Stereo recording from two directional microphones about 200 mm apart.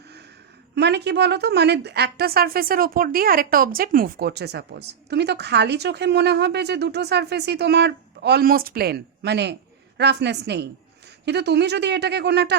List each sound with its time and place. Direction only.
0.8 s a woman's voice: 55° right (ahead or behind)